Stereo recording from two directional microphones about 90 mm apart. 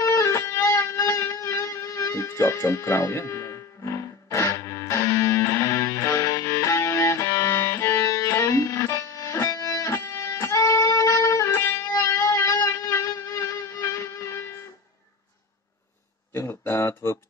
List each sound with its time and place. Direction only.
0.0 s music: 35° left (ahead or behind)
11.2 s music: 25° left (ahead or behind)
11.9 s music: 35° left (ahead or behind)
16.3 s a sound: 30° left (ahead or behind)